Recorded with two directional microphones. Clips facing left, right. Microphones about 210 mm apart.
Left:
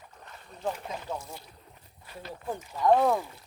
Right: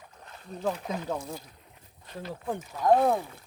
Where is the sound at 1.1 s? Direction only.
55° right (ahead or behind).